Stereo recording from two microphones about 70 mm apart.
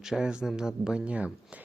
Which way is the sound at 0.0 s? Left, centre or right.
Centre.